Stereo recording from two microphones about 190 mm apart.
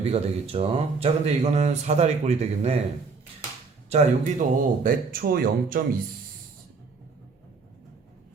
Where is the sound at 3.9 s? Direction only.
35° right (ahead or behind).